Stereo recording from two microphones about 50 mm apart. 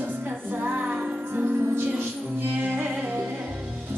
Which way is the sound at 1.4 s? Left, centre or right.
Right.